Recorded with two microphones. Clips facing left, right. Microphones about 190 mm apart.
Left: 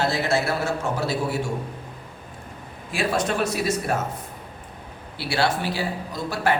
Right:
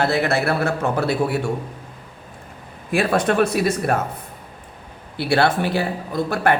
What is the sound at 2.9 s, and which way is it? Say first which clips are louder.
A woman's voice: right 5 dB; 60° right (ahead or behind).